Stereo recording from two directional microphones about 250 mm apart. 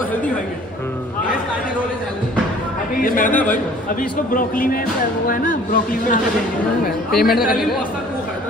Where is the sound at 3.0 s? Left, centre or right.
Left.